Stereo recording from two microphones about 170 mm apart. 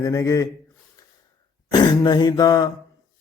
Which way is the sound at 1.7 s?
25° left (ahead or behind).